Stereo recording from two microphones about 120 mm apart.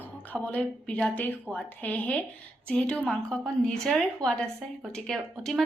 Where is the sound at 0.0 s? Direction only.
15° left (ahead or behind).